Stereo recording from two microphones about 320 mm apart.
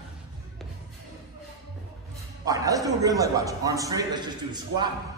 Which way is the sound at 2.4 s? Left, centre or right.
Centre.